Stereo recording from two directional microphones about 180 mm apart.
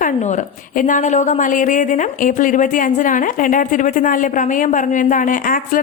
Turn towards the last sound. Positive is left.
turn(degrees=50)  # may be behind; listen again after turning